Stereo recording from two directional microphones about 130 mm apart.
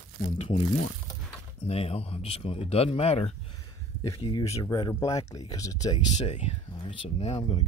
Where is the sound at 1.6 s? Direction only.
50° left (ahead or behind).